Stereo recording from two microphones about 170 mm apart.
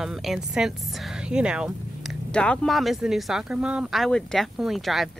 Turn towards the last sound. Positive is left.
turn(degrees=0)  # may be behind; listen again after turning